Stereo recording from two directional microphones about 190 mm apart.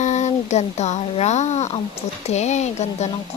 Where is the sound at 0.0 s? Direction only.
40° left (ahead or behind).